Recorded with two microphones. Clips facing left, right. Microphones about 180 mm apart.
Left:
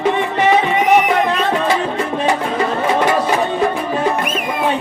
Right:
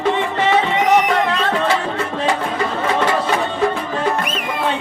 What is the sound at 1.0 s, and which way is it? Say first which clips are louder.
Music: left 2 dB; 25° left (ahead or behind).